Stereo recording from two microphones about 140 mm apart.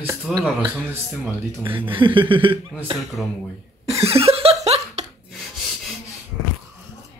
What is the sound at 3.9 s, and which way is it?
Chuckle, 45° right (ahead or behind).